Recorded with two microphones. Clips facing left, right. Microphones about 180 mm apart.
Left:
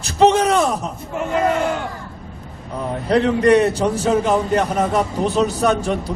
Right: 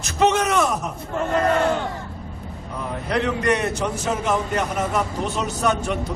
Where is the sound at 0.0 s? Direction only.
35° left (ahead or behind).